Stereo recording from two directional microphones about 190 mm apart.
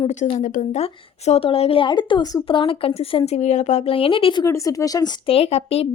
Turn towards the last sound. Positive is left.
turn(degrees=30)  # may be behind; listen again after turning